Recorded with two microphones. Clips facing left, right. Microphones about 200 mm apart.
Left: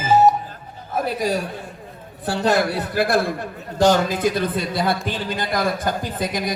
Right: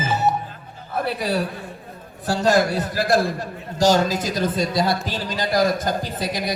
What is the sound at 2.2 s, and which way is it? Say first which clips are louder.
A man's voice: right 1 dB; 60° left (ahead or behind).